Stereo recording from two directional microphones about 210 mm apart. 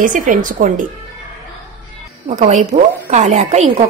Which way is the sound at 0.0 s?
40° right (ahead or behind).